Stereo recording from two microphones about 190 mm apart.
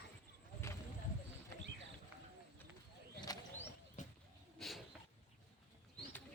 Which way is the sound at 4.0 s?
40° left (ahead or behind).